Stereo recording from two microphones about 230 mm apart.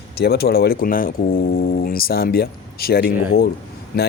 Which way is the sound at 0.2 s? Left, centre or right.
Left.